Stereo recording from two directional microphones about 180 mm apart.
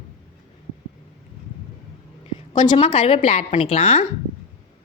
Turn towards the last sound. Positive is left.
turn(degrees=35)  # may be behind; listen again after turning